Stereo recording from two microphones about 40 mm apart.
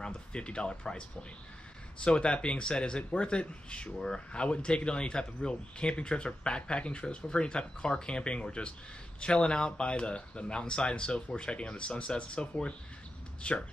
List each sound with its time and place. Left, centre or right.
0.0 s speech: left